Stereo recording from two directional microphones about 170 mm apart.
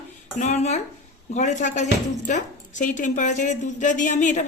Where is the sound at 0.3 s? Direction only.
40° left (ahead or behind).